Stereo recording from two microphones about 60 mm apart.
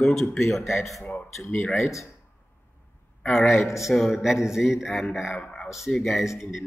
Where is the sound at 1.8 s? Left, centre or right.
Left.